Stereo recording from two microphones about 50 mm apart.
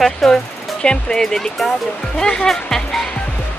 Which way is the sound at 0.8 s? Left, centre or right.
Centre.